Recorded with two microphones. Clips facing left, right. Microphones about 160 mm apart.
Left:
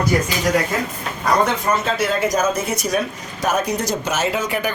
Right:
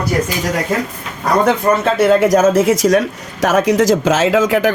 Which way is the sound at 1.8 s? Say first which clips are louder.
Right 8 dB; 65° right (ahead or behind).